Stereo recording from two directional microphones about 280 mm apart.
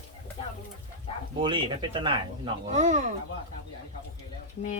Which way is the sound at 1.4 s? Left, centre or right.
Centre.